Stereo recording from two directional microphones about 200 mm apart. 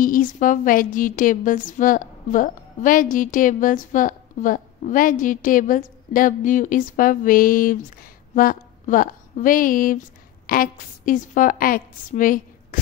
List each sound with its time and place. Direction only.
0.0 s a woman's voice: 45° left (ahead or behind)